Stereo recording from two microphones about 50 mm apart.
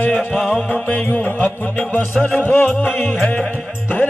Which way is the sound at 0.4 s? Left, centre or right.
Centre.